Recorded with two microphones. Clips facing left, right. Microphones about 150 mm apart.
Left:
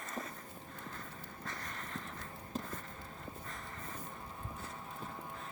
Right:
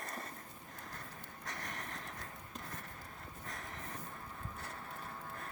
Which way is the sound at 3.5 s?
70° right (ahead or behind).